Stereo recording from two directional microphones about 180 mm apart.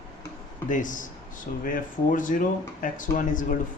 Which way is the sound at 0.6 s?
45° left (ahead or behind).